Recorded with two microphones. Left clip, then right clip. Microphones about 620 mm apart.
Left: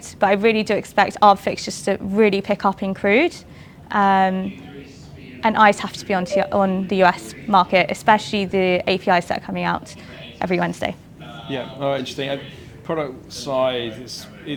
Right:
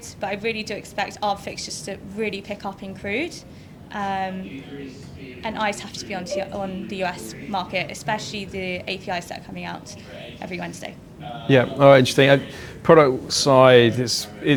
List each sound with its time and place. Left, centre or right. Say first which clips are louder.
0.2 s a woman's voice: left 10 dB; left
5.4 s a woman's voice: left 11 dB; left
11.4 s speech: right 10 dB; right